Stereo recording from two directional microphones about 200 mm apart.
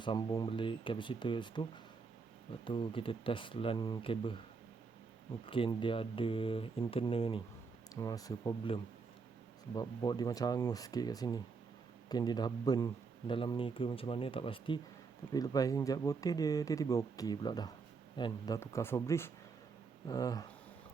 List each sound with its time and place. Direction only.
0.0 s speech: 25° left (ahead or behind)
2.6 s speech: 25° left (ahead or behind)
5.5 s speech: 25° left (ahead or behind)